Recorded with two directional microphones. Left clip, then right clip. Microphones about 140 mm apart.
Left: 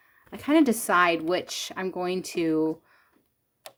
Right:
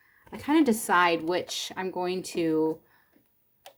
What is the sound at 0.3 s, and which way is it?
Speech, 35° left (ahead or behind).